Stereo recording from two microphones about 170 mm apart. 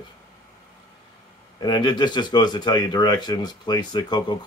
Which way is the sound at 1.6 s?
25° left (ahead or behind).